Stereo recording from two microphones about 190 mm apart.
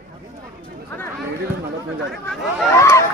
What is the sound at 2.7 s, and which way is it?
Speech, 15° left (ahead or behind).